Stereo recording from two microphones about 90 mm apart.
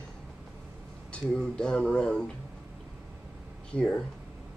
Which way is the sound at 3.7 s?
10° left (ahead or behind).